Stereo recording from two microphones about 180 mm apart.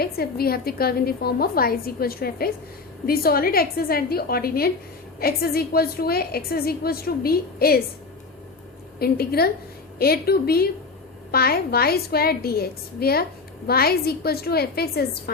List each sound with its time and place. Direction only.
0.0 s a woman's voice: 60° left (ahead or behind)
9.0 s a woman's voice: 60° left (ahead or behind)